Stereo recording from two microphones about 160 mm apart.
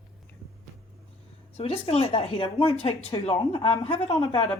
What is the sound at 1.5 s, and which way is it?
A woman's voice, 40° left (ahead or behind).